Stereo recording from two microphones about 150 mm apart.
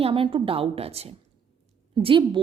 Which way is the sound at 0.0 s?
35° right (ahead or behind).